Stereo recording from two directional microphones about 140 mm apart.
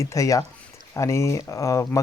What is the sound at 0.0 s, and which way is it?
Speech, 20° left (ahead or behind).